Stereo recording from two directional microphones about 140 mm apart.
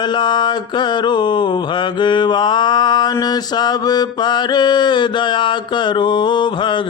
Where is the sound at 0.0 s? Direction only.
35° left (ahead or behind).